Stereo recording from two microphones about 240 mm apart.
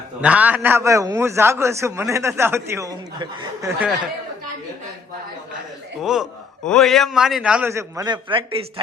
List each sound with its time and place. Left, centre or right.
0.2 s a man's voice: centre
6.0 s a man's voice: centre; by 8.6 s right